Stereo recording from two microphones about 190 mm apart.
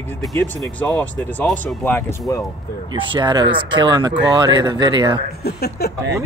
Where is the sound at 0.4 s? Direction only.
10° left (ahead or behind).